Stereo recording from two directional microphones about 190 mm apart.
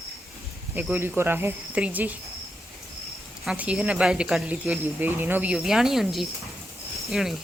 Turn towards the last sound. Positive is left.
turn(degrees=0)  # may be behind; listen again after turning